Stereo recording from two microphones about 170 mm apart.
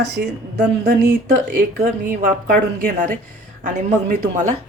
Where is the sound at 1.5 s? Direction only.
55° right (ahead or behind).